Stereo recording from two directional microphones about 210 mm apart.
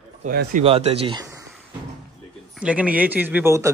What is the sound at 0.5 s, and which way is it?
Speech, 30° right (ahead or behind).